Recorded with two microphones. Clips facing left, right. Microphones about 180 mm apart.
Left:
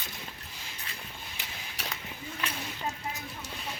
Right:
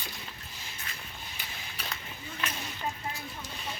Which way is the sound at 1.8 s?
80° left.